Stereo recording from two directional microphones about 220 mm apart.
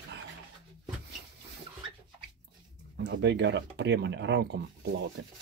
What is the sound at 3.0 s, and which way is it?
Speech, 50° right (ahead or behind).